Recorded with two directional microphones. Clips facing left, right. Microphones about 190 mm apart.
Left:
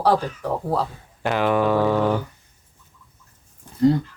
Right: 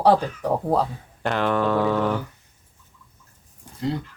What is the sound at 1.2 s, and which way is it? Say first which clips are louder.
Speech: left 2 dB; 5° left (ahead or behind).